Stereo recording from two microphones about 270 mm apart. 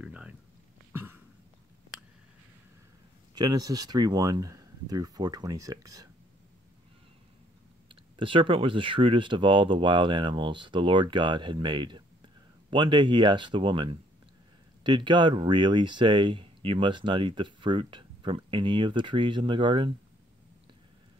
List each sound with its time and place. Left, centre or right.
0.0 s a sound: centre
3.3 s speech: centre
7.9 s speech: centre